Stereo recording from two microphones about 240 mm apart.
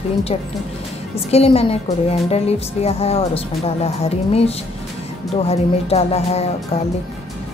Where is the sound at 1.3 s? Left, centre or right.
Left.